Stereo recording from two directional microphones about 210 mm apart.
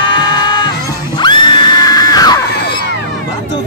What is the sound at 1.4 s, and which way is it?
Screaming, 20° left (ahead or behind).